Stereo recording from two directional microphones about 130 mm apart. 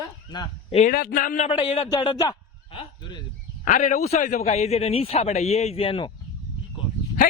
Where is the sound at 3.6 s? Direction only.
75° left (ahead or behind); by 6.1 s 45° left (ahead or behind).